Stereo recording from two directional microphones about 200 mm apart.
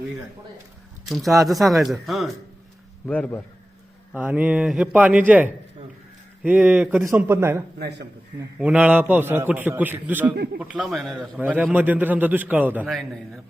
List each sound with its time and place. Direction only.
1.1 s a man's voice: centre (ahead or behind)
4.1 s a man's voice: 5° right (ahead or behind)
7.8 s a man's voice: 60° right (ahead or behind)
8.5 s a man's voice: 5° right (ahead or behind)
10.3 s a man's voice: 55° right (ahead or behind)
10.6 s a man's voice: 5° right (ahead or behind)